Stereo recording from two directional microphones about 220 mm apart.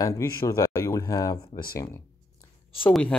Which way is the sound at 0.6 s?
10° left (ahead or behind).